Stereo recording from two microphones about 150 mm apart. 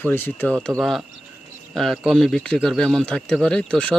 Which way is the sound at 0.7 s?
20° right (ahead or behind).